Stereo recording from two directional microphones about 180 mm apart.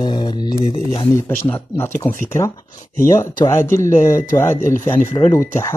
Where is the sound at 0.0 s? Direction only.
25° left (ahead or behind).